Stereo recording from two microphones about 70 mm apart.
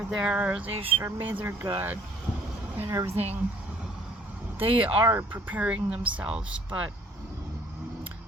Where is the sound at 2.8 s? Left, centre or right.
Right.